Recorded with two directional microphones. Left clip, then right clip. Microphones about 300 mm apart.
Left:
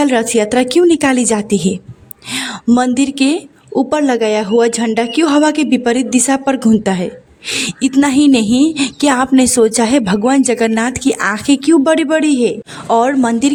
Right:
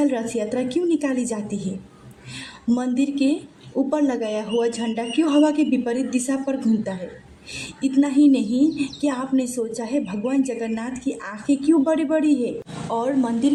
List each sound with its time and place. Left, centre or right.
0.0 s speech: left